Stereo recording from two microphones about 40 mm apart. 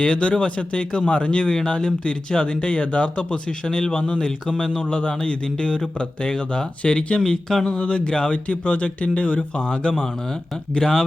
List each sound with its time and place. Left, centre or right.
0.0 s speech: left